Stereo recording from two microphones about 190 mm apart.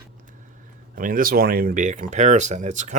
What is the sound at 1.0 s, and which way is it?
Speech, 45° right (ahead or behind).